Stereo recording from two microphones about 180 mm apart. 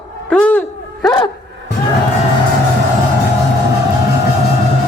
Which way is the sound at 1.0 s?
25° left (ahead or behind).